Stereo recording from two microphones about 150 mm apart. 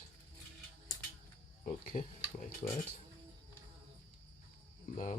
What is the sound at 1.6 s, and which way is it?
Speech, 60° left (ahead or behind).